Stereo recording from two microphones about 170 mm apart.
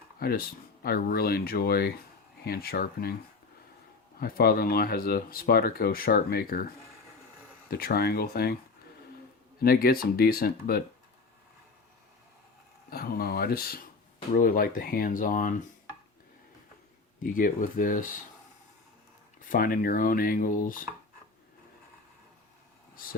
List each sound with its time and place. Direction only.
0.2 s speech: 60° left (ahead or behind)
4.2 s speech: 60° left (ahead or behind)
7.7 s speech: 60° left (ahead or behind)
9.6 s speech: 60° left (ahead or behind)
12.9 s speech: 60° left (ahead or behind)
17.2 s speech: 55° left (ahead or behind)
19.4 s speech: 55° left (ahead or behind)